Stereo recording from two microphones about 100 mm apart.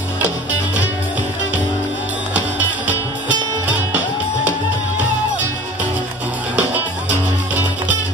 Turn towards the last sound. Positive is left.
turn(degrees=-20)  # may be behind; listen again after turning